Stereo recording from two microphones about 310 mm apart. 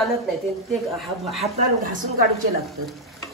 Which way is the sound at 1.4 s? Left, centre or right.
Right.